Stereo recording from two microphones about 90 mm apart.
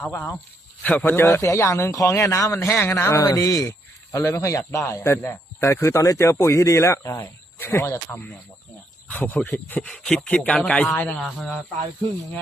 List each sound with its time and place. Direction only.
0.1 s speech: 25° left (ahead or behind)
0.8 s a man's voice: 15° left (ahead or behind)
1.1 s speech: 25° left (ahead or behind)
9.8 s speech: 10° left (ahead or behind)